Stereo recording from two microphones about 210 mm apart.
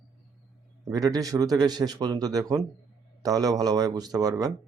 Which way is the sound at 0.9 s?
15° right (ahead or behind).